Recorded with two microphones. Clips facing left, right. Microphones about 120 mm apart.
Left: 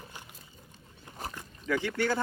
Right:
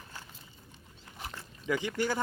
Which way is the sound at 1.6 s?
15° right (ahead or behind).